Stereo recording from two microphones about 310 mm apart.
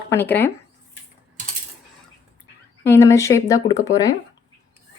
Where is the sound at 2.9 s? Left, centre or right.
Centre.